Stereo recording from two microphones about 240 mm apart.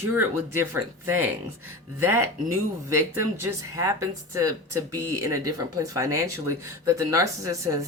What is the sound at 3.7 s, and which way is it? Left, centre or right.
Speech, centre.